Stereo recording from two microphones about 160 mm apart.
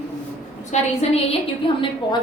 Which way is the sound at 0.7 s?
45° left (ahead or behind).